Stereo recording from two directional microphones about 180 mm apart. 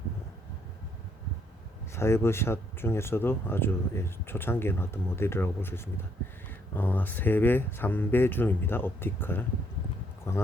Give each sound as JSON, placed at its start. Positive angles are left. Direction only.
{"t": 2.0, "sound": "speech", "side_deg": 15}